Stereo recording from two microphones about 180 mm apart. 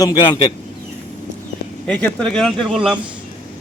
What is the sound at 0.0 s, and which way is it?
Speech, 25° left (ahead or behind).